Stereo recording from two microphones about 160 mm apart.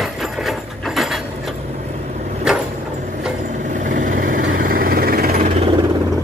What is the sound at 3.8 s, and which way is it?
Vehicle, 55° right (ahead or behind).